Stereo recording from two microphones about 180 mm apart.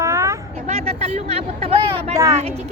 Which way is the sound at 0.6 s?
35° right (ahead or behind).